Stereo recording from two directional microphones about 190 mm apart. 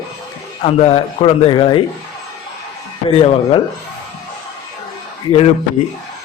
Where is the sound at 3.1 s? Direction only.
30° left (ahead or behind).